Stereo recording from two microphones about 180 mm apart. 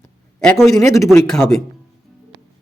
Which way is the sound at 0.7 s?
20° left (ahead or behind).